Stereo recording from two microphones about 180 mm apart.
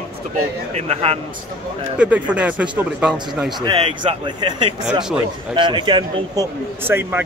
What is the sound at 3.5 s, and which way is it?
Speech, 25° right (ahead or behind).